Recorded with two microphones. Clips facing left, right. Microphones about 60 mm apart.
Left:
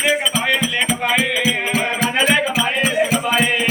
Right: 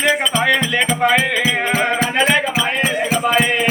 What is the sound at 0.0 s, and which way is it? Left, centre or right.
Music, right.